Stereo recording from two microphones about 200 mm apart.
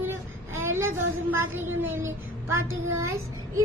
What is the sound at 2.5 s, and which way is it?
Child singing, 90° right.